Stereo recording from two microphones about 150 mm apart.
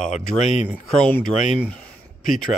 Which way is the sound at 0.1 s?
50° left (ahead or behind).